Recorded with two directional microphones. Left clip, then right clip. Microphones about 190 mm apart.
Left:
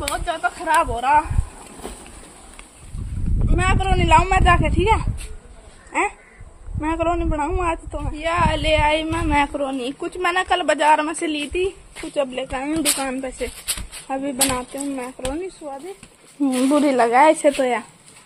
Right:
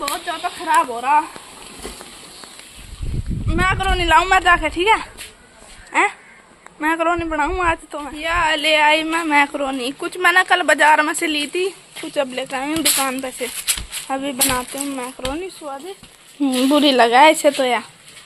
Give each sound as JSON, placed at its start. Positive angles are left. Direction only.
{"t": 0.1, "sound": "speech", "side_deg": 5}
{"t": 3.5, "sound": "a man's voice", "side_deg": -5}
{"t": 5.9, "sound": "a sound", "side_deg": -5}
{"t": 6.8, "sound": "a man's voice", "side_deg": -5}
{"t": 15.6, "sound": "speech", "side_deg": -20}
{"t": 16.4, "sound": "a man's voice", "side_deg": 5}